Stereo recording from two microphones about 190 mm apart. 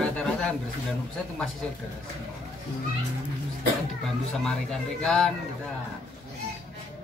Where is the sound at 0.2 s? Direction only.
5° left (ahead or behind).